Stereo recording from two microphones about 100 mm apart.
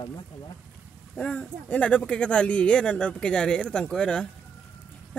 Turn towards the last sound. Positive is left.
turn(degrees=10)  # may be behind; listen again after turning